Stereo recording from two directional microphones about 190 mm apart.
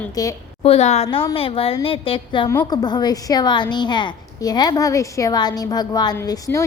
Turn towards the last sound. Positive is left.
turn(degrees=15)  # may be behind; listen again after turning